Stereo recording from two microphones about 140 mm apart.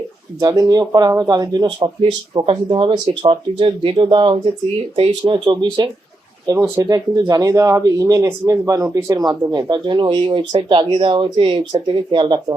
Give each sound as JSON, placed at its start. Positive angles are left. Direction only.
{"t": 0.3, "sound": "speech", "side_deg": -25}
{"t": 6.5, "sound": "speech", "side_deg": -20}